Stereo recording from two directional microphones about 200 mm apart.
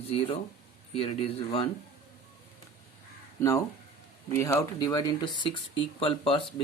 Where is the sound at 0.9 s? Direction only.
30° left (ahead or behind).